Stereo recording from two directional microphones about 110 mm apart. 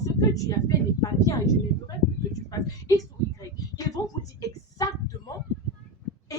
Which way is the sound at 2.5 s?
30° left (ahead or behind).